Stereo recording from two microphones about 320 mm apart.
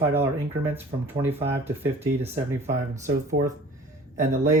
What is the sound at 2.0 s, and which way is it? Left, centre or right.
Speech, centre.